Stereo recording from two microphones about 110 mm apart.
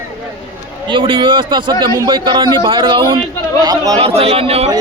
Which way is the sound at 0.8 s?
50° right (ahead or behind).